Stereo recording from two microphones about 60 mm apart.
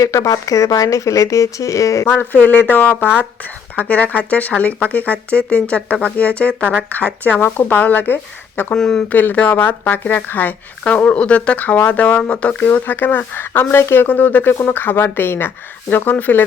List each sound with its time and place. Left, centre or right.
0.0 s speech: left
2.1 s speech: left
8.7 s speech: centre
9.1 s speech: left